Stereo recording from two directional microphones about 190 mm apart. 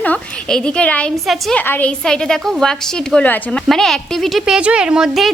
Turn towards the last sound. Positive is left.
turn(degrees=0)  # may be behind; listen again after turning